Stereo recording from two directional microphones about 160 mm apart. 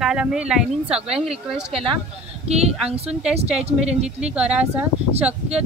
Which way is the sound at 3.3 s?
40° right (ahead or behind).